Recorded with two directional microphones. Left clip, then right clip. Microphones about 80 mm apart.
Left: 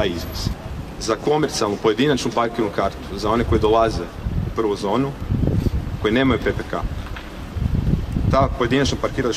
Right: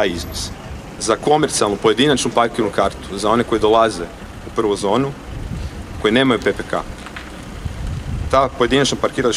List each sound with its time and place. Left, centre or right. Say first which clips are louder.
0.0 s speech: right 3 dB; right
8.3 s speech: right 4 dB; right